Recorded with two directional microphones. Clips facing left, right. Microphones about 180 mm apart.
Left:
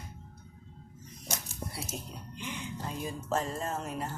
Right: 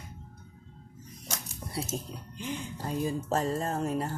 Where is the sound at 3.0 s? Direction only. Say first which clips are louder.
Right 4 dB; 35° right (ahead or behind).